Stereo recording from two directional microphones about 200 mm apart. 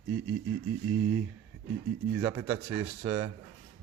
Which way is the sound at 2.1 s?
10° right (ahead or behind).